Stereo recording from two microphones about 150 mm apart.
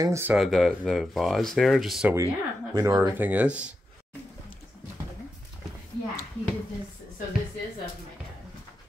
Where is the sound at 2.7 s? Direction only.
20° right (ahead or behind).